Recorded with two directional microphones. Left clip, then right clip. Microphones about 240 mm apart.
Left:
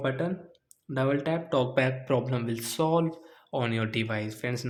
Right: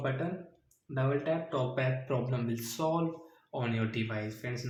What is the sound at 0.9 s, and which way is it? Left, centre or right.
Speech, left.